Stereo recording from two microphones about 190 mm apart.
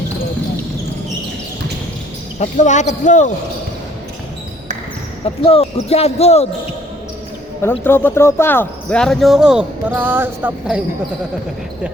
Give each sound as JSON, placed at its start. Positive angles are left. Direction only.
{"t": 2.4, "sound": "speech", "side_deg": 40}
{"t": 5.2, "sound": "speech", "side_deg": 30}
{"t": 7.6, "sound": "speech", "side_deg": 10}